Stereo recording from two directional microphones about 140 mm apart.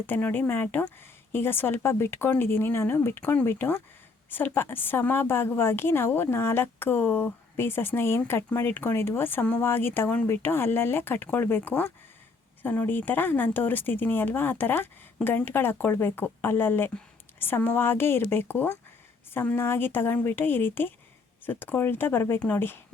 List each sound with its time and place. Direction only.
0.1 s a woman's voice: 15° left (ahead or behind)